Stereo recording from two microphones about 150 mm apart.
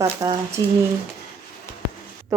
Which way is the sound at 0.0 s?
25° right (ahead or behind).